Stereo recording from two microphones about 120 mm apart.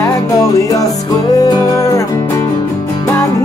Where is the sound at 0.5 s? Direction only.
30° left (ahead or behind).